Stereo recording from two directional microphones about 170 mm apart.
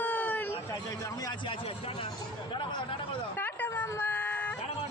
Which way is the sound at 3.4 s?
10° left (ahead or behind).